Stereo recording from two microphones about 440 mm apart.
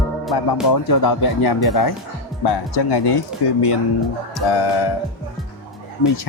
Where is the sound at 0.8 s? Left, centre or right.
Left.